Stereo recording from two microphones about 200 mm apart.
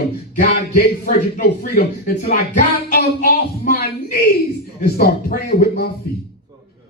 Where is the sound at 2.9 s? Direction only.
50° left (ahead or behind).